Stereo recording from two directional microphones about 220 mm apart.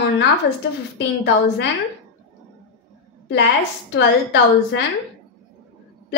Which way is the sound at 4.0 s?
50° left (ahead or behind).